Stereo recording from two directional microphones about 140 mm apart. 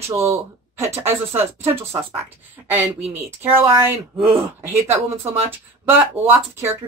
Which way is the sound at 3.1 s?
15° right (ahead or behind).